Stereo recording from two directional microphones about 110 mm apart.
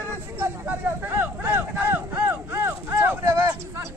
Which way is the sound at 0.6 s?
15° right (ahead or behind).